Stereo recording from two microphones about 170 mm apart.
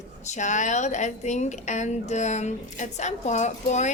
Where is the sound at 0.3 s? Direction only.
45° left (ahead or behind).